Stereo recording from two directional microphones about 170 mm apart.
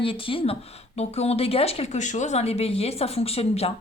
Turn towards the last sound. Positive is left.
turn(degrees=35)  # may be behind; listen again after turning